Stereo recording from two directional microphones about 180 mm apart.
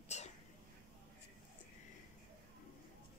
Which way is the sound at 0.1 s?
40° left (ahead or behind).